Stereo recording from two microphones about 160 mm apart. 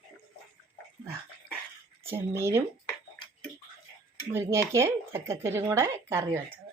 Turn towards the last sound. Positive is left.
turn(degrees=-15)  # may be behind; listen again after turning